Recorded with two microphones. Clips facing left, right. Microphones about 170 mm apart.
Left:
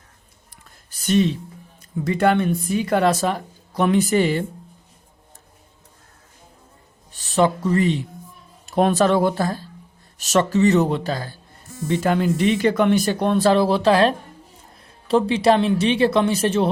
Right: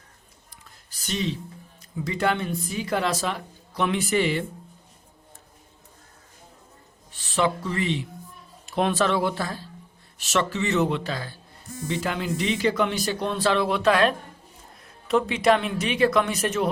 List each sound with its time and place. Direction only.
0.9 s a sound: 55° left (ahead or behind)
2.0 s speech: 55° left (ahead or behind)
7.2 s speech: 40° left (ahead or behind)